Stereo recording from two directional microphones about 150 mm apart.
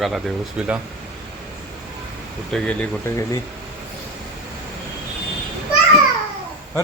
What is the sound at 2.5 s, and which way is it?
Speech, 5° left (ahead or behind).